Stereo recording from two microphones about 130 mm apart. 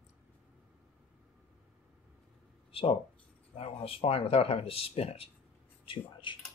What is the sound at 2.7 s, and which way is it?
Speech, 45° left (ahead or behind).